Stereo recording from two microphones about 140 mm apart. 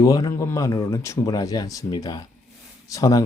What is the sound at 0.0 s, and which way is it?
Speech, 25° left (ahead or behind).